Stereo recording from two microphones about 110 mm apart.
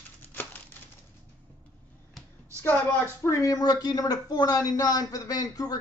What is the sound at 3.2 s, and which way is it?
Speech, 30° left (ahead or behind).